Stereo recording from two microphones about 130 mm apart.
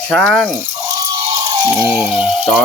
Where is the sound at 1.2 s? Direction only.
20° right (ahead or behind).